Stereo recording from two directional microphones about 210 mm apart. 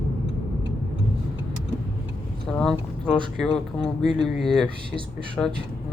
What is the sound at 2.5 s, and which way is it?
Speech, 5° left (ahead or behind).